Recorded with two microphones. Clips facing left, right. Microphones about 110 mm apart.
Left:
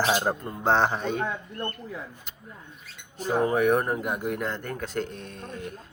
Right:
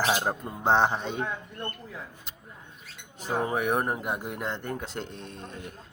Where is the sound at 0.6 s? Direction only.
15° right (ahead or behind).